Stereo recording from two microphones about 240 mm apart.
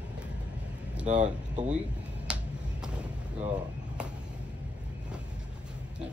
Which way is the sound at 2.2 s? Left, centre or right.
Centre.